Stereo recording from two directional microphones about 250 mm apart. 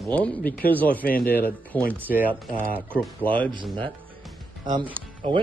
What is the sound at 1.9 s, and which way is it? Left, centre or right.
Speech, centre.